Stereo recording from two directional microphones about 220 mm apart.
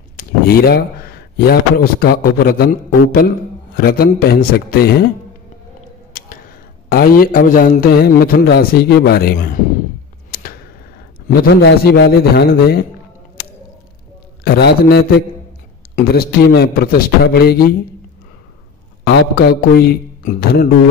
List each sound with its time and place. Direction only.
0.2 s a man's voice: 45° left (ahead or behind)
6.9 s a man's voice: 40° left (ahead or behind)
10.3 s a sound: 40° left (ahead or behind)
11.2 s a man's voice: 45° left (ahead or behind)
14.4 s a man's voice: 50° left (ahead or behind)
19.0 s a man's voice: 45° left (ahead or behind)